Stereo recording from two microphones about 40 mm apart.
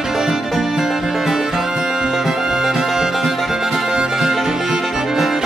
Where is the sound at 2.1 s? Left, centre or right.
Centre.